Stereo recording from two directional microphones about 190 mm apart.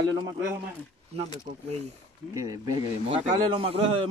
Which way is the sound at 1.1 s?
35° right (ahead or behind).